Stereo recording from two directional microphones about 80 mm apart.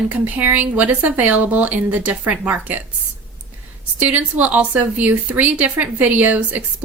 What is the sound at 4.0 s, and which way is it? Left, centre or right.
A woman's voice, right.